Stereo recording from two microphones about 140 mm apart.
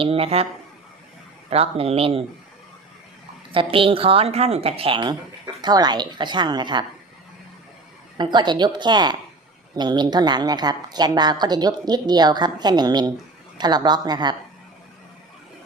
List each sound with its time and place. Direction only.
0.0 s speech: 45° right (ahead or behind)
1.5 s speech: 45° right (ahead or behind)
3.5 s a woman's voice: 40° right (ahead or behind)
8.2 s a woman's voice: 35° right (ahead or behind)